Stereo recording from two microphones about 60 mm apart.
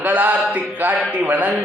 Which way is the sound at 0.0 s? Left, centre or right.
Right.